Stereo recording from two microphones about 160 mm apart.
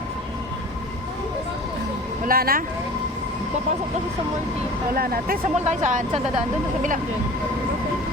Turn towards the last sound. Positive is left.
turn(degrees=-50)  # may be behind; listen again after turning